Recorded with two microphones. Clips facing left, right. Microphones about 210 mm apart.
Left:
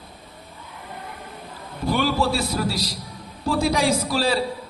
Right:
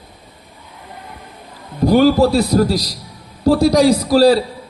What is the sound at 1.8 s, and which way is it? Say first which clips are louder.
A man's voice: right 11 dB; 40° right (ahead or behind).